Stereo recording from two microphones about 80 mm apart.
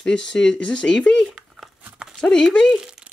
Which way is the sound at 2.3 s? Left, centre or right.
Centre.